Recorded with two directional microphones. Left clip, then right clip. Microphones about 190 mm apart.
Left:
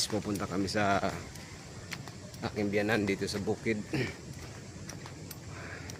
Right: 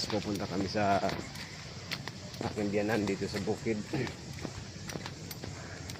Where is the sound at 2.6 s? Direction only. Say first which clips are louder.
Left 2 dB; 25° left (ahead or behind).